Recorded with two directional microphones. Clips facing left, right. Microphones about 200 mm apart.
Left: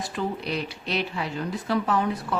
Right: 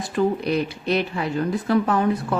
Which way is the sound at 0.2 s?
50° right (ahead or behind).